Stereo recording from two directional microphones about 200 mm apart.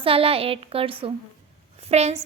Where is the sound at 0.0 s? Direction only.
30° right (ahead or behind).